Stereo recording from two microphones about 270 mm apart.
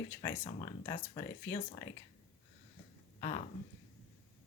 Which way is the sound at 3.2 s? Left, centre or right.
Left.